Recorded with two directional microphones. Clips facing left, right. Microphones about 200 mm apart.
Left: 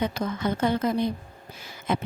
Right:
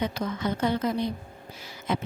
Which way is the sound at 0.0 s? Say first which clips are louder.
Left 2 dB; 50° left (ahead or behind).